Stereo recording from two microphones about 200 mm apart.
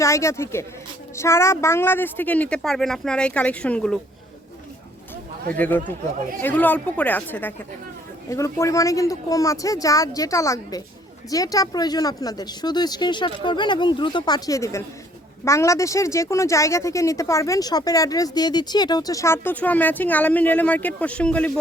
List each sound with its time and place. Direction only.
0.0 s speech: 15° left (ahead or behind)
5.5 s speech: 10° left (ahead or behind)